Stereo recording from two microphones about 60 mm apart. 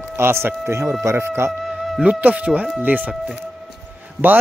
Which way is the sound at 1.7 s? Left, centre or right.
Centre.